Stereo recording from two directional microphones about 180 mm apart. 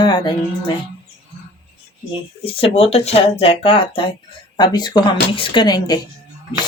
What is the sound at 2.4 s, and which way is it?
Speech, 30° left (ahead or behind).